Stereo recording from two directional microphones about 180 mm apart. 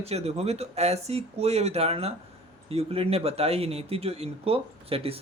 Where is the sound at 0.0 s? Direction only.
35° right (ahead or behind).